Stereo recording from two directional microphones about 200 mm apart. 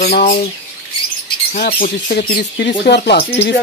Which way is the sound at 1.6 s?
45° left (ahead or behind).